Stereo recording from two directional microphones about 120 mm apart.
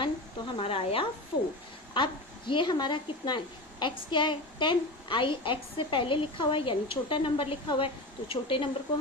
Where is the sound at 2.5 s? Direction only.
40° left (ahead or behind).